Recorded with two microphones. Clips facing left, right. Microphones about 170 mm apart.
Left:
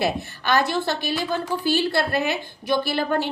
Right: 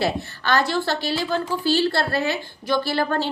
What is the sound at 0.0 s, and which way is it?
A woman's voice, 20° left (ahead or behind).